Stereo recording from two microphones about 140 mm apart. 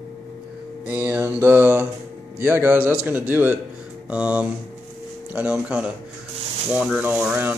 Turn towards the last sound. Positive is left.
turn(degrees=-15)  # may be behind; listen again after turning